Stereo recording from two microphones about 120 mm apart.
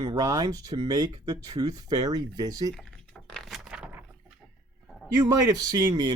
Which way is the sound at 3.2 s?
5° left (ahead or behind).